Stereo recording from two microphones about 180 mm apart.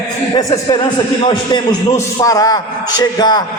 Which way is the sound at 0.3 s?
25° left (ahead or behind).